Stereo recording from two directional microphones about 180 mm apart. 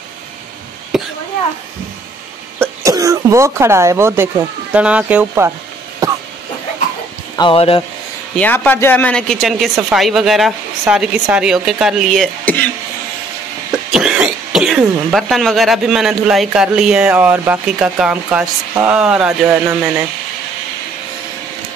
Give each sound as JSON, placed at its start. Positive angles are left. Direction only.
{"t": 0.9, "sound": "cough", "side_deg": 0}
{"t": 2.6, "sound": "speech", "side_deg": -20}
{"t": 6.0, "sound": "a sound", "side_deg": -20}
{"t": 7.3, "sound": "speech", "side_deg": 30}
{"t": 8.4, "sound": "speech", "side_deg": 10}
{"t": 13.7, "sound": "speech", "side_deg": -5}